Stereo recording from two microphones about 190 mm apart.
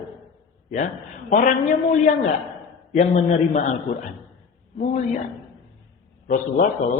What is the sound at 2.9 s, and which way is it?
Speech, 40° left (ahead or behind).